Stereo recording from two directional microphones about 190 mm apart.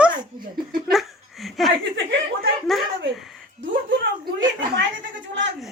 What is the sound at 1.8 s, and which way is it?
Speech, 70° right (ahead or behind).